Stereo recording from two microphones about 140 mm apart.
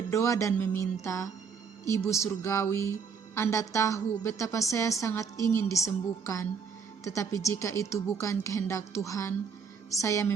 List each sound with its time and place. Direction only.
0.1 s speech: 20° left (ahead or behind)